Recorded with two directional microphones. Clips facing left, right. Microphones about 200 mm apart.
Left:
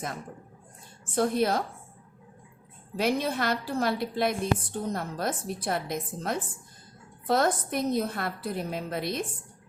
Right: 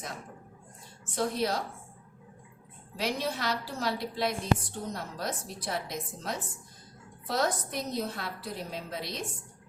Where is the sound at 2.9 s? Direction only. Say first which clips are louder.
Left 5 dB; 55° left (ahead or behind).